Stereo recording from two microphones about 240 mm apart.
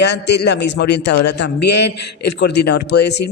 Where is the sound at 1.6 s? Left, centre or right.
Left.